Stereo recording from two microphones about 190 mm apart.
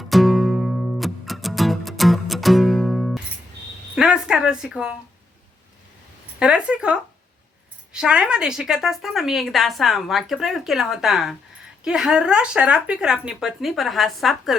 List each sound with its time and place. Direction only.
0.0 s music: centre (ahead or behind)
3.9 s a sound: 5° right (ahead or behind)
6.4 s a woman's voice: 5° right (ahead or behind)